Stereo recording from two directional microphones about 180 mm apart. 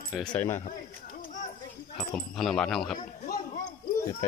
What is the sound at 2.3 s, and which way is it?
Speech, centre (ahead or behind).